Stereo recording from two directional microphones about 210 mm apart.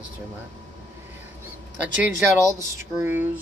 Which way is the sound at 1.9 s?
10° right (ahead or behind).